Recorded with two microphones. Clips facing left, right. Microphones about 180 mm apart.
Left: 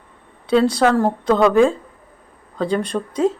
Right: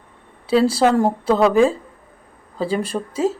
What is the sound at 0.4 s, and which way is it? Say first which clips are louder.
A woman's voice: even; 5° right (ahead or behind).